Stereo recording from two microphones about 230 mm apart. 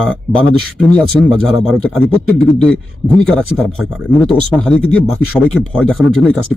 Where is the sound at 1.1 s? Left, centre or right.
Centre.